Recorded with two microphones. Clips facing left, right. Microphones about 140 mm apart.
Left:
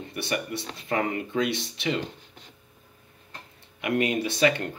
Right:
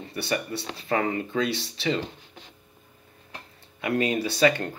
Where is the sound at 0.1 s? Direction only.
30° right (ahead or behind).